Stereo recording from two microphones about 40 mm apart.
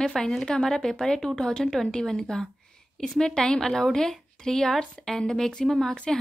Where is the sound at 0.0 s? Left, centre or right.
Centre.